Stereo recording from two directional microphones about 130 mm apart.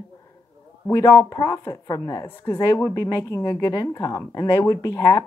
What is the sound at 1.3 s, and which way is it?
Speech, 25° left (ahead or behind).